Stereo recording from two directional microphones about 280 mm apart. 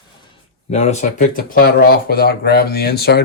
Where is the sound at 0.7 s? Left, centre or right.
Left.